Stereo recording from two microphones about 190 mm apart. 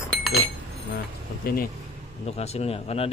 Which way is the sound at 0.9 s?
55° left (ahead or behind).